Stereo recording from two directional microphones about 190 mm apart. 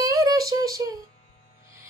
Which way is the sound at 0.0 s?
15° right (ahead or behind).